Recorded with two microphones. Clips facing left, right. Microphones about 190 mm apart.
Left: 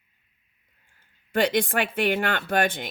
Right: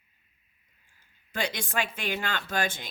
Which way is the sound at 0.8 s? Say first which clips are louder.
Left 1 dB; 55° left (ahead or behind).